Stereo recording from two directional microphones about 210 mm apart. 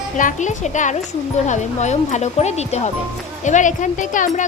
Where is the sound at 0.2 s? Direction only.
35° left (ahead or behind).